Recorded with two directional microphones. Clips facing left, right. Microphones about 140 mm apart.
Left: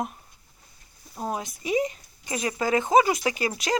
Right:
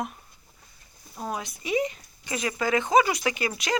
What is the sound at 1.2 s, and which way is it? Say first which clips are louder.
Speech: left 2 dB; 35° left (ahead or behind).